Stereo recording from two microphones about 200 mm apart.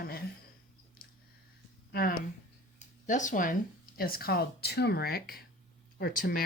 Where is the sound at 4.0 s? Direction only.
50° left (ahead or behind).